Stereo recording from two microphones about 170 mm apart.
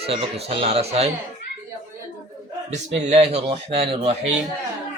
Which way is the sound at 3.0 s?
40° right (ahead or behind).